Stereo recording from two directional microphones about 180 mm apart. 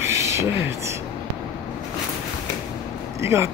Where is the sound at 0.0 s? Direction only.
15° right (ahead or behind).